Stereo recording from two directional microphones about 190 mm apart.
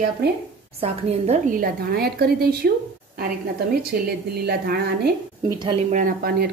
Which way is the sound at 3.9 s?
55° right (ahead or behind).